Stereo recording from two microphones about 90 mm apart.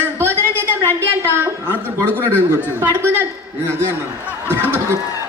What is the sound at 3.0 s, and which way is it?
A man's voice, 25° right (ahead or behind).